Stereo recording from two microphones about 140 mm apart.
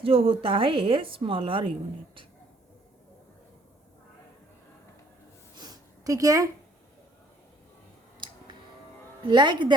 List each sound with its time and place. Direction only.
0.0 s a woman's voice: 40° right (ahead or behind)
5.5 s a sound: 30° right (ahead or behind)
9.2 s a woman's voice: 30° right (ahead or behind)